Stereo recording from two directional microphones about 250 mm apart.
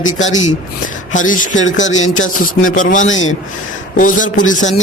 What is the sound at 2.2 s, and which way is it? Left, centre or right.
Speech, left.